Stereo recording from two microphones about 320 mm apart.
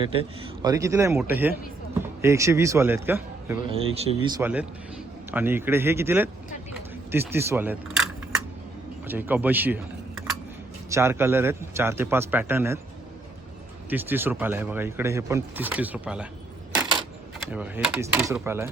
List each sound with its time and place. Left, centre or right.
0.0 s speech: centre
3.7 s speech: centre
10.8 s speech: centre
13.9 s speech: centre
17.5 s speech: centre